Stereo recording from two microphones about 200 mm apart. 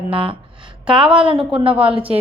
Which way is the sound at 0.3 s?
25° right (ahead or behind).